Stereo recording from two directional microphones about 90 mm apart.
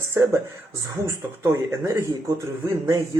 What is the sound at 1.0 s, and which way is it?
Speech, 30° right (ahead or behind).